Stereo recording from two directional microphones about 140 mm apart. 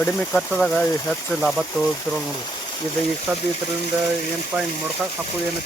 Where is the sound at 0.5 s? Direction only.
Centre (ahead or behind).